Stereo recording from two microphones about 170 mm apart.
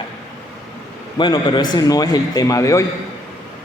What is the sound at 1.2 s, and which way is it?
A man's voice, 25° left (ahead or behind).